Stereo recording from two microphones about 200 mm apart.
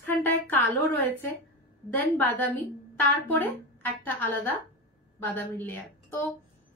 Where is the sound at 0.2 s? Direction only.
10° left (ahead or behind).